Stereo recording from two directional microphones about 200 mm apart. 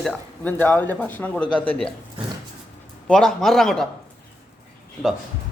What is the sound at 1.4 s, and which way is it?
Speech, 25° left (ahead or behind).